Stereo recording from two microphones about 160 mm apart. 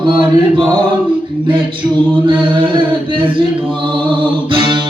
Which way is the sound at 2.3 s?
30° right (ahead or behind).